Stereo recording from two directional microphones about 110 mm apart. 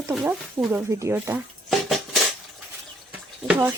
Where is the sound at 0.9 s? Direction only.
25° right (ahead or behind).